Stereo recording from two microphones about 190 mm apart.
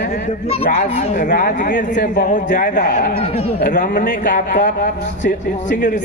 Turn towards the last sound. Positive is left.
turn(degrees=40)  # may be behind; listen again after turning